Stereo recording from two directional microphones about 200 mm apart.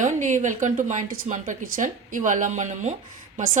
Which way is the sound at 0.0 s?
40° right (ahead or behind).